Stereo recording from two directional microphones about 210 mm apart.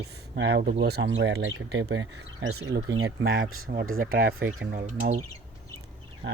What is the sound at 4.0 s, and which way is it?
Speech, 45° right (ahead or behind).